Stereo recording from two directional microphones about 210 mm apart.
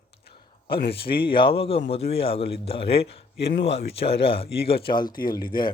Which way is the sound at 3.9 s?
25° left (ahead or behind).